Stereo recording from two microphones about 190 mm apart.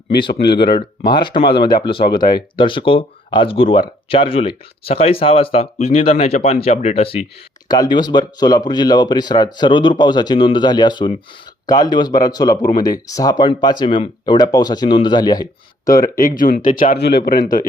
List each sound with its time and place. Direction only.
0.4 s speech: 60° left (ahead or behind)
0.7 s speech: 25° left (ahead or behind)
1.6 s a man's voice: 50° left (ahead or behind)
1.9 s speech: 25° left (ahead or behind)
16.2 s a man's voice: 45° left (ahead or behind)